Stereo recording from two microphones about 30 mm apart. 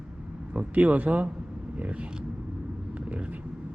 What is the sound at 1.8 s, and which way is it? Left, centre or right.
Speech, right.